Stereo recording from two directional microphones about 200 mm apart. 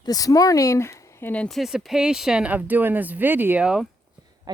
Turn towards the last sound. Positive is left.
turn(degrees=-5)  # may be behind; listen again after turning